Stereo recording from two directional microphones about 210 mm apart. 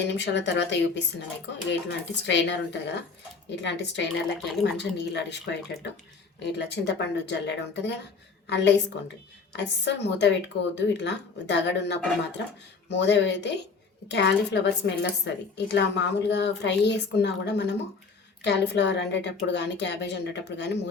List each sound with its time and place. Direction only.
0.0 s a woman's voice: 55° left (ahead or behind)